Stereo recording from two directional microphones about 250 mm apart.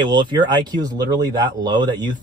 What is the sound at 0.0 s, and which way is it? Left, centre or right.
Speech, centre.